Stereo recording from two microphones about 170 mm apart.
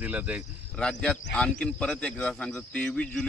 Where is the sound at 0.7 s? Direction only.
5° left (ahead or behind).